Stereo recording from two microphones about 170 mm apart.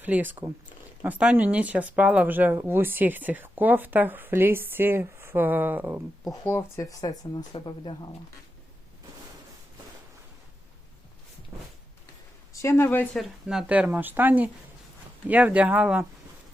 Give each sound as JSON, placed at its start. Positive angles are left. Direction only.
{"t": 0.0, "sound": "speech", "side_deg": -10}
{"t": 6.4, "sound": "speech", "side_deg": 15}
{"t": 12.5, "sound": "a woman's voice", "side_deg": 15}
{"t": 13.1, "sound": "speech", "side_deg": 0}